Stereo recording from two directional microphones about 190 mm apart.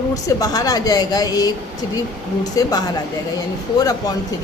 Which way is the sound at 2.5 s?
20° left (ahead or behind).